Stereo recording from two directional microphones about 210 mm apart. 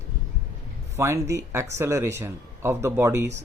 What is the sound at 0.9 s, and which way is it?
Speech, 15° right (ahead or behind).